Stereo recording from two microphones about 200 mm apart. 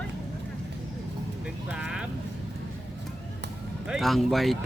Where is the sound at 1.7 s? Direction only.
5° right (ahead or behind).